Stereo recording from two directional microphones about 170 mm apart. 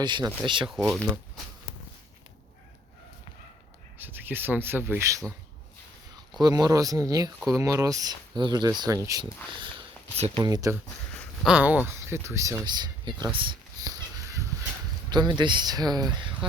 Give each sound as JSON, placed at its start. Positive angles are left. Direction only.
{"t": 0.0, "sound": "speech", "side_deg": -25}
{"t": 0.7, "sound": "speech", "side_deg": 0}
{"t": 3.9, "sound": "speech", "side_deg": -10}
{"t": 6.4, "sound": "speech", "side_deg": -20}
{"t": 10.4, "sound": "speech", "side_deg": -20}
{"t": 11.4, "sound": "speech", "side_deg": -10}
{"t": 11.9, "sound": "a sound", "side_deg": -15}
{"t": 15.1, "sound": "speech", "side_deg": -25}